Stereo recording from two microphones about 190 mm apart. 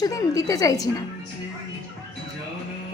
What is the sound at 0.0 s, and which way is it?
Speech, 20° left (ahead or behind).